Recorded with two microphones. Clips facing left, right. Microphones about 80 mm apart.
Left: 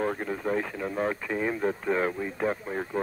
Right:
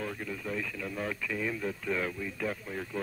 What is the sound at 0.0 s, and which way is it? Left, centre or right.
Speech, left.